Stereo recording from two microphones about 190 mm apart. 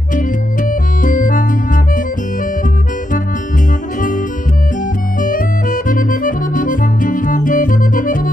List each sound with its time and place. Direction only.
0.7 s organ: 45° left (ahead or behind)
5.2 s accordion: 45° left (ahead or behind)